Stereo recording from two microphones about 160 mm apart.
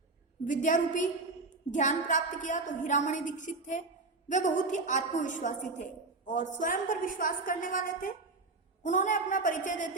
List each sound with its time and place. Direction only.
0.4 s a woman's voice: 55° left (ahead or behind)